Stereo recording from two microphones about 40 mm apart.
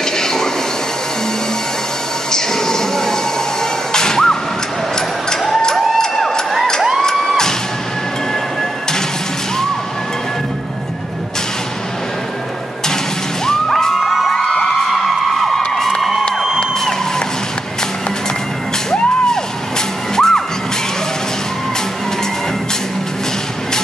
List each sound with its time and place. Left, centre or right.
0.0 s a sound: centre
2.3 s train: centre
3.9 s music: centre
5.3 s a sound: centre
13.5 s music: centre
13.9 s music: centre
14.3 s music: left
14.9 s a sound: centre
20.2 s music: centre